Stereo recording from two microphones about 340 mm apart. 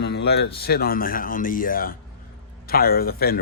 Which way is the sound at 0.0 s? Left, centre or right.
Left.